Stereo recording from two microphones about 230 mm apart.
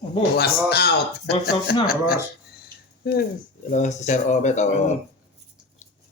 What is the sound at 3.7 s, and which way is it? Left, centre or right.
Speech, left.